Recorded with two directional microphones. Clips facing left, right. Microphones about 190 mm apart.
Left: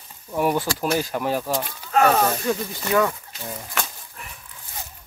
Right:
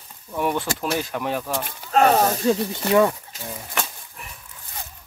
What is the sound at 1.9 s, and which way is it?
Speech, 35° right (ahead or behind).